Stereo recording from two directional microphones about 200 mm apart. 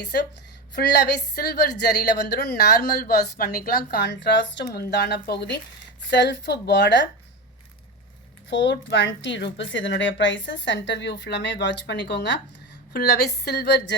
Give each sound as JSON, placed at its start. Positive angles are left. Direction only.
{"t": 0.0, "sound": "a woman's voice", "side_deg": 55}
{"t": 8.4, "sound": "a woman's voice", "side_deg": 65}
{"t": 12.9, "sound": "a sound", "side_deg": 50}